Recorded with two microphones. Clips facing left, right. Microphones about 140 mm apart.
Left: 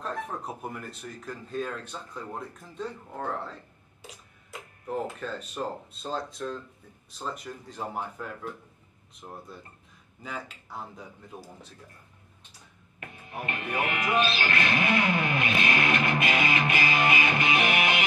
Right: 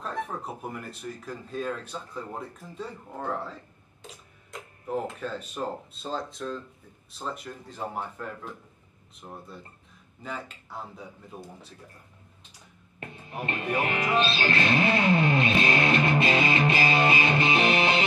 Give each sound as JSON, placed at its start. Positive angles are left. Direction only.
{"t": 0.6, "sound": "speech", "side_deg": 0}
{"t": 13.0, "sound": "speech", "side_deg": -30}